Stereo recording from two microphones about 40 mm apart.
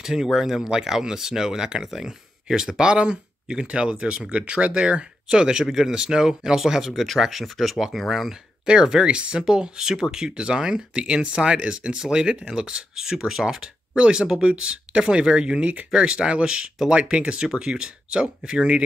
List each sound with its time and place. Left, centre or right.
0.0 s speech: centre
6.9 s speech: centre
8.6 s speech: centre
13.9 s speech: right